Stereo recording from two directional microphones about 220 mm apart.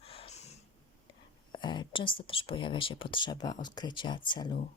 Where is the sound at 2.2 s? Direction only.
25° left (ahead or behind).